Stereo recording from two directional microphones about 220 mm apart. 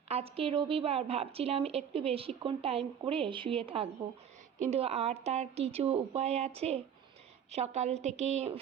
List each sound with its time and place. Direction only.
0.1 s a woman's voice: 25° right (ahead or behind)